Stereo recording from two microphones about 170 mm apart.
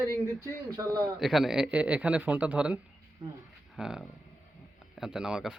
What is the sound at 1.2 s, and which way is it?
A man's voice, centre (ahead or behind).